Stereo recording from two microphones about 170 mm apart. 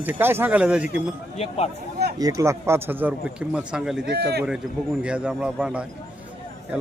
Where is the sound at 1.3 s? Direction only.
40° left (ahead or behind).